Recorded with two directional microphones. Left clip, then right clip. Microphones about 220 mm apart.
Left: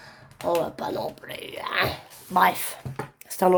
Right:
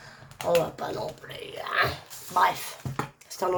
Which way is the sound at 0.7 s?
45° left (ahead or behind).